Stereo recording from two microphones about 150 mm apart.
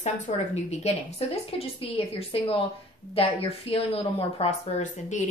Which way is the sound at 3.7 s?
40° left (ahead or behind).